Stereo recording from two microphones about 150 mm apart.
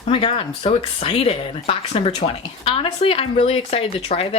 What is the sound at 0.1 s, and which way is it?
Speech, 40° left (ahead or behind).